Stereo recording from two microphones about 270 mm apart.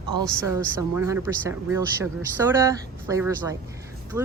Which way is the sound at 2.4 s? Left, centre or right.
Centre.